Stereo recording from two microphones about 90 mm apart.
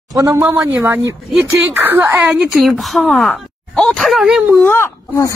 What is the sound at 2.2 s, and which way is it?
Speech, 5° right (ahead or behind).